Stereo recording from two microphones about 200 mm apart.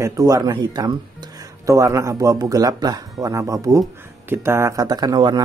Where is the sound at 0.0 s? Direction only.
15° right (ahead or behind).